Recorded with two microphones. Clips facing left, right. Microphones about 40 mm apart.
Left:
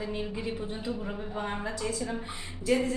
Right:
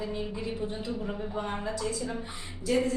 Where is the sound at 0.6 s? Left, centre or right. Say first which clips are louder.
Right 1 dB; centre.